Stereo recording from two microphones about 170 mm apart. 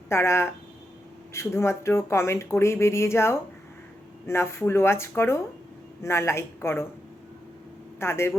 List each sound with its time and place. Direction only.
0.1 s speech: 15° left (ahead or behind)
7.9 s speech: 15° left (ahead or behind)